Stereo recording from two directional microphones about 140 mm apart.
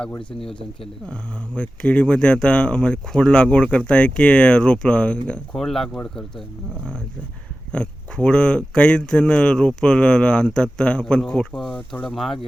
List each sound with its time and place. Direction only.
0.2 s speech: 40° left (ahead or behind)
1.0 s speech: 5° left (ahead or behind)
7.7 s speech: 5° left (ahead or behind)